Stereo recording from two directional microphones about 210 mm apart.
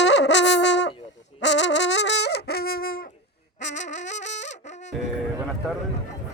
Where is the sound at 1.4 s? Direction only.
60° left (ahead or behind).